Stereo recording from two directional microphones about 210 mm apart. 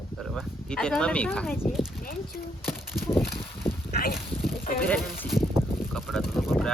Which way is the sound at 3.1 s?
10° left (ahead or behind).